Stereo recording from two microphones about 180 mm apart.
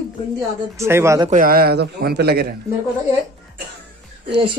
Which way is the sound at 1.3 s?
55° right (ahead or behind).